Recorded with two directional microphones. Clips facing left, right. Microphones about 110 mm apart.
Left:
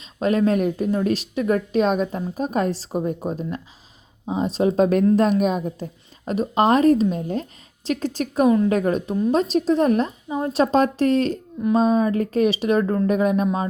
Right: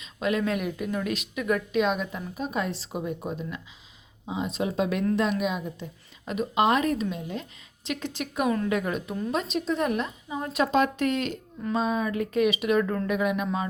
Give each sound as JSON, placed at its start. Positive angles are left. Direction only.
{"t": 0.0, "sound": "a woman's voice", "side_deg": 40}